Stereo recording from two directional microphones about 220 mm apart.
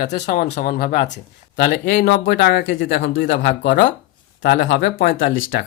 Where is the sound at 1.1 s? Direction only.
50° left (ahead or behind).